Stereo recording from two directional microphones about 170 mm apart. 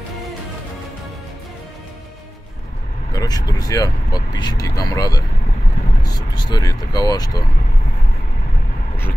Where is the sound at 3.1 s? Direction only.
20° left (ahead or behind).